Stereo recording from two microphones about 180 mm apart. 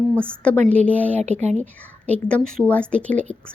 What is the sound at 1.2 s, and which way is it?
Speech, 40° right (ahead or behind).